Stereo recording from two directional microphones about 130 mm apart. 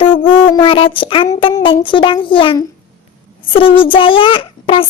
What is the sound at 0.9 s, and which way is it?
A child's voice, 40° left (ahead or behind).